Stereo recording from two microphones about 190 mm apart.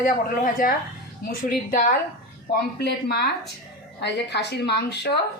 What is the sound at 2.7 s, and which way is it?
A woman's voice, 60° left (ahead or behind).